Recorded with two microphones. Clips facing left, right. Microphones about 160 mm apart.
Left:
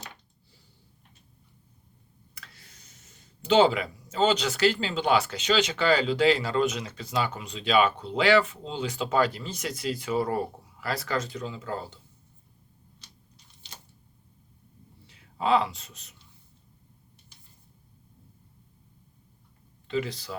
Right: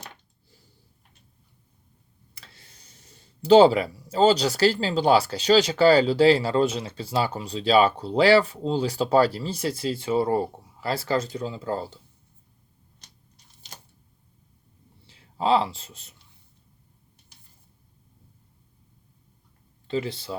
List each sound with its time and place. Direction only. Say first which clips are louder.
2.3 s speech: even; 30° right (ahead or behind)
15.0 s speech: right 3 dB; 30° right (ahead or behind)
19.9 s speech: right 2 dB; 30° right (ahead or behind)